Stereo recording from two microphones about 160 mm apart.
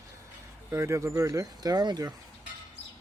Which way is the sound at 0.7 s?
15° right (ahead or behind).